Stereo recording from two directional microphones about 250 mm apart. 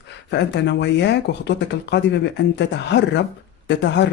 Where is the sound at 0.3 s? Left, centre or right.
Left.